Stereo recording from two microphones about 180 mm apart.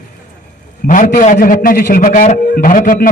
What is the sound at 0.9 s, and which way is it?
A man's voice, 45° left (ahead or behind).